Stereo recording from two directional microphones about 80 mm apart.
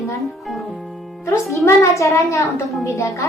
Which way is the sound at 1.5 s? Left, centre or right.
Left.